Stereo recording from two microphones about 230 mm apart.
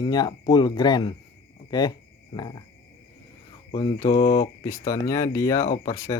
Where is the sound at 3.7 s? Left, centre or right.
Centre.